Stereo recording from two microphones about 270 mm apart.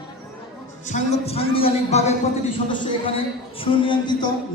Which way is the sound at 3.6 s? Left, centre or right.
Centre.